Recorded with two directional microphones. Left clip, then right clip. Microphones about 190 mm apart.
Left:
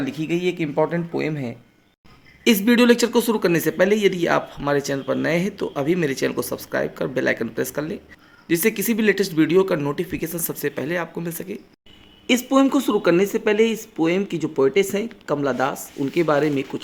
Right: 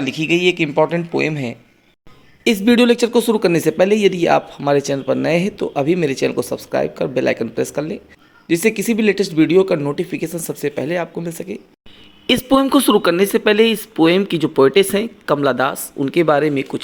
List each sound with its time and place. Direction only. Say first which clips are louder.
0.0 s speech: right 7 dB; 20° right (ahead or behind)